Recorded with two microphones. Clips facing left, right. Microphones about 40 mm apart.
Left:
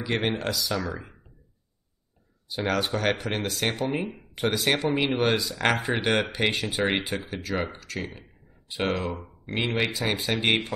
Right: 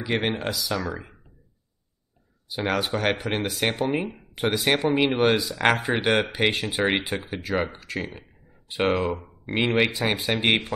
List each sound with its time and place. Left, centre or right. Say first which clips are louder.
0.0 s speech: right 1 dB; centre
2.4 s speech: right 1 dB; centre